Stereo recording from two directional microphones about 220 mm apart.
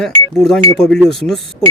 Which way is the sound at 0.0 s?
Centre (ahead or behind).